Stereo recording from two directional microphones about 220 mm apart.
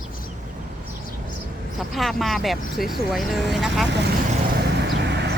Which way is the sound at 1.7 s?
Centre (ahead or behind).